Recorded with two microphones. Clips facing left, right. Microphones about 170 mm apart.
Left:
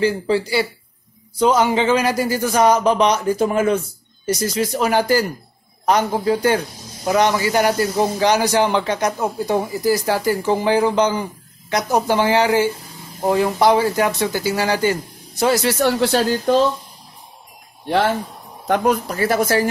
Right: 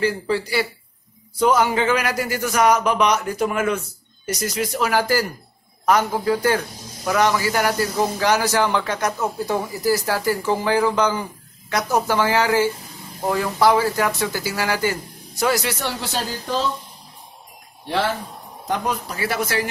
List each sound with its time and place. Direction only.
0.0 s a man's voice: 25° left (ahead or behind)
15.8 s speech: 65° left (ahead or behind)
18.7 s speech: 55° left (ahead or behind)